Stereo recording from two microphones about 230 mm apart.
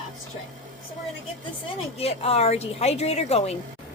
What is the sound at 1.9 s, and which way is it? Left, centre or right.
A woman's voice, left.